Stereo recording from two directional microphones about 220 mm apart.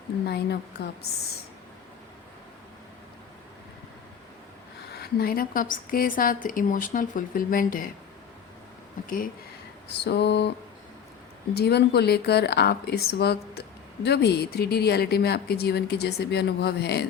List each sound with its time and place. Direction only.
0.3 s speech: 50° left (ahead or behind)
4.9 s a woman's voice: 45° left (ahead or behind)
9.0 s a woman's voice: 40° left (ahead or behind)
10.0 s speech: 50° left (ahead or behind)
11.5 s speech: 50° left (ahead or behind)